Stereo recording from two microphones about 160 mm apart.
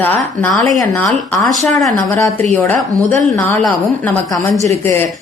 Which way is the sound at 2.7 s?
10° left (ahead or behind).